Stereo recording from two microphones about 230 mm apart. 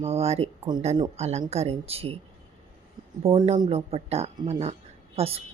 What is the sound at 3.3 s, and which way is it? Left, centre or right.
A woman's voice, right.